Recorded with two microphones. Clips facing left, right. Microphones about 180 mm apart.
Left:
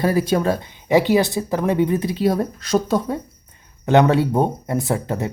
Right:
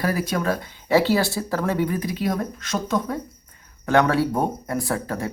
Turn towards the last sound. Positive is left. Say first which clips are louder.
# left 3 dB
turn(degrees=20)  # may be behind; listen again after turning